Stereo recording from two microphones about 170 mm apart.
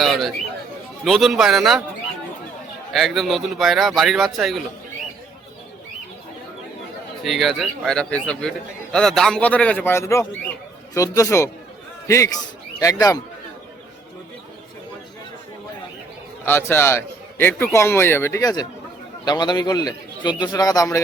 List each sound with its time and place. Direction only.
0.0 s a man's voice: centre (ahead or behind)
2.9 s a man's voice: centre (ahead or behind)
7.3 s a man's voice: centre (ahead or behind); by 13.2 s 20° left (ahead or behind)
16.5 s a man's voice: 15° left (ahead or behind)